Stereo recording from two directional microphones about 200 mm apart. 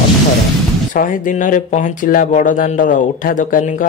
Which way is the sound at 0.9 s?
40° left (ahead or behind).